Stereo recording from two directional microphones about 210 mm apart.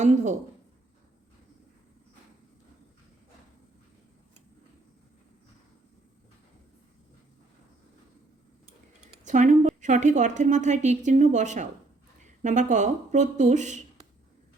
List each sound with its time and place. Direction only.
0.0 s a woman's voice: 35° right (ahead or behind)
9.2 s a woman's voice: 35° right (ahead or behind)